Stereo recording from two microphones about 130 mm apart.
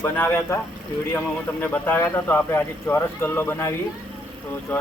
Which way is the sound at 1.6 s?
15° left (ahead or behind).